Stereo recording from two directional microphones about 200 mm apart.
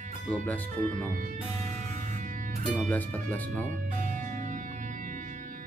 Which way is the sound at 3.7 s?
40° right (ahead or behind).